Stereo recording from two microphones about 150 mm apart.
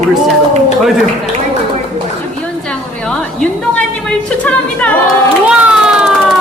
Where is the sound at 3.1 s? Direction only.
5° left (ahead or behind).